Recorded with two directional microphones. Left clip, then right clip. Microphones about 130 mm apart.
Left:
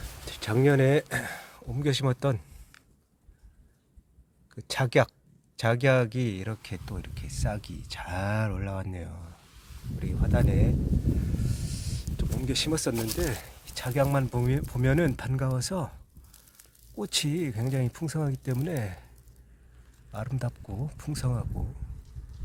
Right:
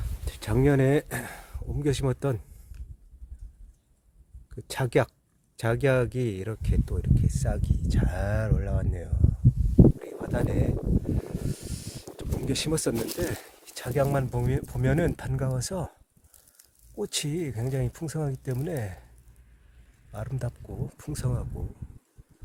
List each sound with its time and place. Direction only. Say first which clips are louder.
0.3 s speech: even; 35° right (ahead or behind)
4.5 s speech: left 1 dB; 30° right (ahead or behind)
10.0 s a sound: even; 40° right (ahead or behind)
11.3 s speech: right 1 dB; 45° right (ahead or behind); by 19.0 s 20° right (ahead or behind)
20.1 s speech: left 1 dB; 30° right (ahead or behind)